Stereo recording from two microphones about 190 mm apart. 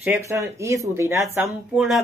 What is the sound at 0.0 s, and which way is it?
Speech, 15° right (ahead or behind).